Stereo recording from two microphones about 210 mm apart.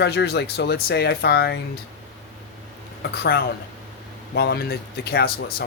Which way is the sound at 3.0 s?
50° left (ahead or behind).